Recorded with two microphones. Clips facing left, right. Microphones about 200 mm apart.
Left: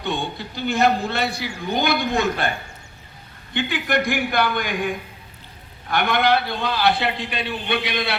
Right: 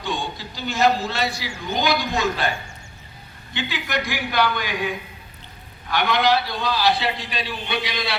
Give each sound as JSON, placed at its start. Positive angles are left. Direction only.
{"t": 0.0, "sound": "a man's voice", "side_deg": 60}